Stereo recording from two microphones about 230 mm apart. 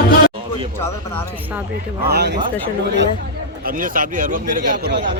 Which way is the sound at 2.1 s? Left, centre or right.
Right.